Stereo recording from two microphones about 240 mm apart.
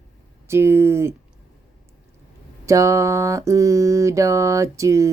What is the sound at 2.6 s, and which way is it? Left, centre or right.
Mantra, centre.